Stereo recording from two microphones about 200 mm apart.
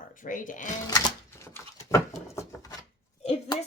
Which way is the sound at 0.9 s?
15° left (ahead or behind).